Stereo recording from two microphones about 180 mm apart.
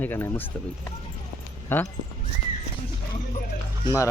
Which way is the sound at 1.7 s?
15° left (ahead or behind).